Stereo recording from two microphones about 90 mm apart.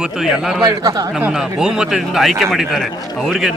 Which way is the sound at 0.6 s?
45° right (ahead or behind).